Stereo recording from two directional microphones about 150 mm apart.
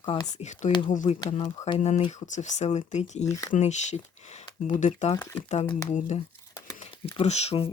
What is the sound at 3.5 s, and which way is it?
Speech, 50° left (ahead or behind).